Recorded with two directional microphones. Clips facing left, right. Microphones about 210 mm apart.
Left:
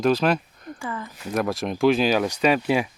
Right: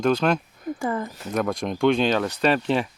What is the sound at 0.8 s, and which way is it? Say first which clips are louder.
Speech: right 5 dB; 40° right (ahead or behind).